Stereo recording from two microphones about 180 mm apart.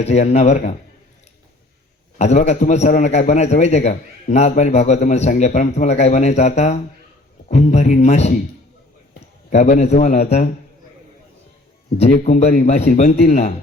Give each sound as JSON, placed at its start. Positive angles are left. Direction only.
{"t": 0.0, "sound": "a man's voice", "side_deg": 40}
{"t": 2.1, "sound": "a man's voice", "side_deg": 40}
{"t": 9.5, "sound": "a man's voice", "side_deg": 40}
{"t": 11.9, "sound": "a man's voice", "side_deg": 40}